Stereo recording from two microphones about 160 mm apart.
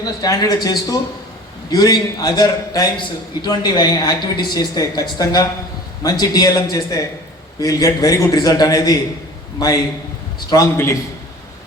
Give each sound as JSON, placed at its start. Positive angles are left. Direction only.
{"t": 0.0, "sound": "a man's voice", "side_deg": 20}